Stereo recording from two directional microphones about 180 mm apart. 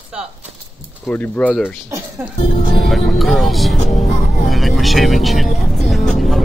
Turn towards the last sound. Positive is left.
turn(degrees=0)  # may be behind; listen again after turning